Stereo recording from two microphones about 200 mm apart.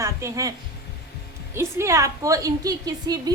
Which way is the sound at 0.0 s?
15° right (ahead or behind).